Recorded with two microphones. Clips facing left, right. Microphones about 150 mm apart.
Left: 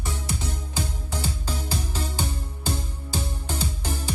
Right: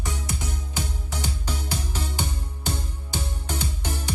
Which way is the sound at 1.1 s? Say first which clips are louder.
Left 1 dB; 15° right (ahead or behind).